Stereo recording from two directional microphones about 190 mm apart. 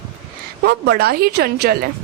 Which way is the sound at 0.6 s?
55° right (ahead or behind).